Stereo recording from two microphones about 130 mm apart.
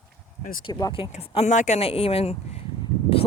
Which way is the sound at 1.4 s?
65° left (ahead or behind).